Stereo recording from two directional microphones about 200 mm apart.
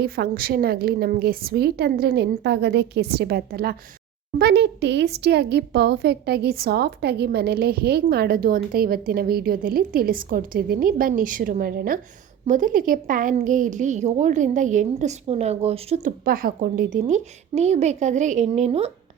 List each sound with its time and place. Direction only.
0.0 s a woman's voice: 50° right (ahead or behind); by 16.1 s 30° right (ahead or behind)
16.2 s a woman's voice: 45° right (ahead or behind)